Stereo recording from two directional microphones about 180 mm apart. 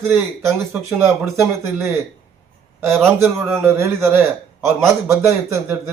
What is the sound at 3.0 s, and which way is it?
Speech, 15° right (ahead or behind).